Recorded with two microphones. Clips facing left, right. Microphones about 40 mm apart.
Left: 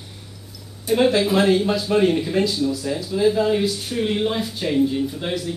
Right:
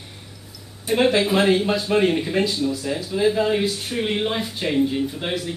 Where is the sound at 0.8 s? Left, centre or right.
Centre.